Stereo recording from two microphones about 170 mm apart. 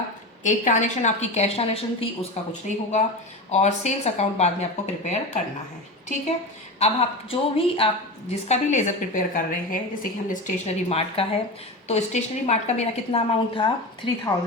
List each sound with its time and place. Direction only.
0.4 s a woman's voice: 45° left (ahead or behind)
6.7 s a woman's voice: 35° left (ahead or behind); by 10.5 s 55° left (ahead or behind)
10.8 s a woman's voice: 35° left (ahead or behind)